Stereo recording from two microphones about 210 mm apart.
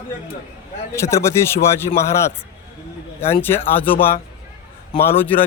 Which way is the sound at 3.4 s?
10° left (ahead or behind).